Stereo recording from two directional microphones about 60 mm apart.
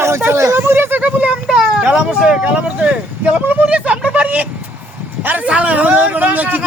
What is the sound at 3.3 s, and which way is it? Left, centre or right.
Vehicle, right.